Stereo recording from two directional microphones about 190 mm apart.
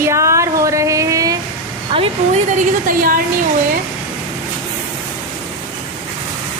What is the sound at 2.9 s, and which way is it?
Speech, 45° right (ahead or behind).